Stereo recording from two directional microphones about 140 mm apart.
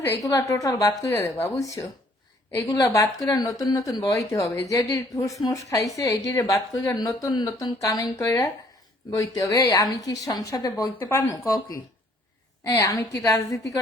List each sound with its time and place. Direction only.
0.0 s a woman's voice: 15° left (ahead or behind)
12.6 s speech: 25° left (ahead or behind)